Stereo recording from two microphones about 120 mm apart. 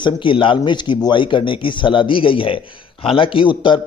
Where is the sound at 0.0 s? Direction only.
45° left (ahead or behind).